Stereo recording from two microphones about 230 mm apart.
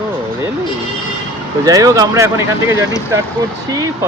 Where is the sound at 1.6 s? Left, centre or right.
Centre.